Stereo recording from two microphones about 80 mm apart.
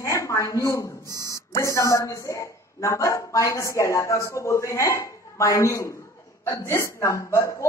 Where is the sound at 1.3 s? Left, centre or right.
Left.